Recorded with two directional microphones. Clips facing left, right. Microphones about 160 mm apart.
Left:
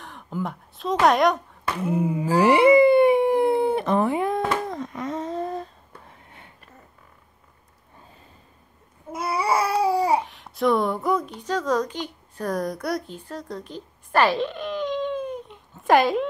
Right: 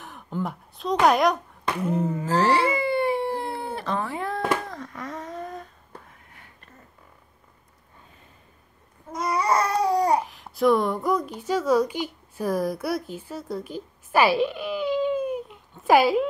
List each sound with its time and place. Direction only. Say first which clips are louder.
0.0 s speech: even; centre (ahead or behind)
1.9 s howl: left 3 dB; 10° left (ahead or behind); by 5.7 s 30° left (ahead or behind)
9.1 s babbling: even; 10° left (ahead or behind)
10.2 s a woman's voice: right 2 dB; centre (ahead or behind)